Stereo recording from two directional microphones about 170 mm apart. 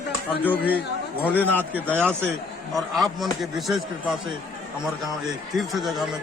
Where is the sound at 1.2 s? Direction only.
10° left (ahead or behind).